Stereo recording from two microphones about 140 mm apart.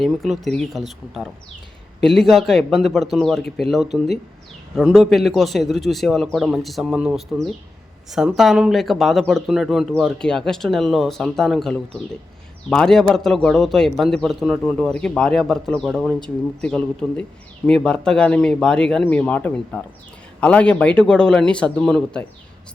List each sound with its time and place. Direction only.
0.0 s speech: centre (ahead or behind)
8.4 s speech: 5° right (ahead or behind)